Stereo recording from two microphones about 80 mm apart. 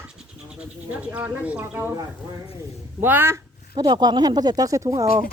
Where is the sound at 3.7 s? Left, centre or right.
Right.